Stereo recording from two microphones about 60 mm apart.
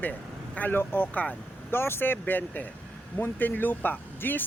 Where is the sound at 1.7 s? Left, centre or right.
Left.